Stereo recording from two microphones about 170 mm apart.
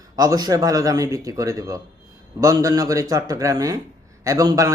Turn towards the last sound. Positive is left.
turn(degrees=-20)  # may be behind; listen again after turning